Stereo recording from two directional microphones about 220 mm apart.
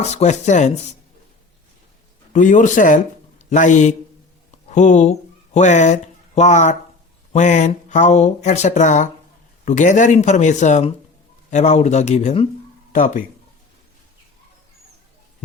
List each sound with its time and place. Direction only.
0.1 s speech: 30° left (ahead or behind)
2.3 s speech: 35° left (ahead or behind)